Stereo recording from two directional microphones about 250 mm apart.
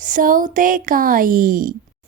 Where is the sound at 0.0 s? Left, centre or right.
Right.